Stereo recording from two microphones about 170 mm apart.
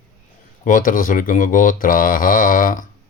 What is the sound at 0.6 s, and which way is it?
Speech, 50° left (ahead or behind).